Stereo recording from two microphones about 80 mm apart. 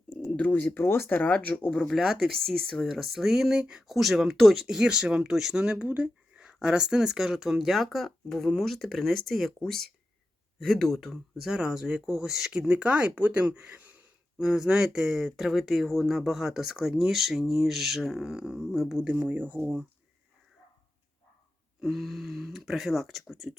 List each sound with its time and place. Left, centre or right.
0.3 s speech: centre
1.9 s speech: centre
14.3 s speech: centre
19.0 s speech: right
21.8 s speech: centre